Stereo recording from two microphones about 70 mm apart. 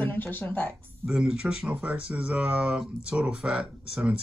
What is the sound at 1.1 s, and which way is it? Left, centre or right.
Speech, centre.